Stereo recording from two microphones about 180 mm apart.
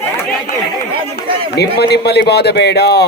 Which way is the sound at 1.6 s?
65° left (ahead or behind).